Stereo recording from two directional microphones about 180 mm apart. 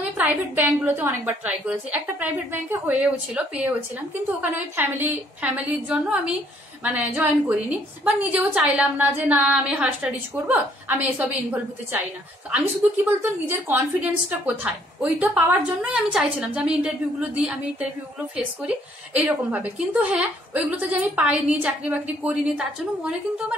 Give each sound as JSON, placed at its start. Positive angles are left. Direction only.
{"t": 0.2, "sound": "a woman's voice", "side_deg": -10}